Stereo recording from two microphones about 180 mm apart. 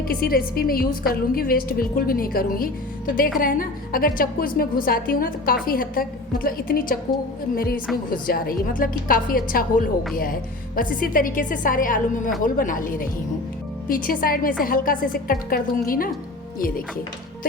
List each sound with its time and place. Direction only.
0.1 s a woman's voice: 55° left (ahead or behind)